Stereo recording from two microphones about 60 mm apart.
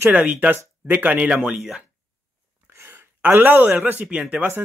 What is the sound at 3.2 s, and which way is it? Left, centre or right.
Speech, right.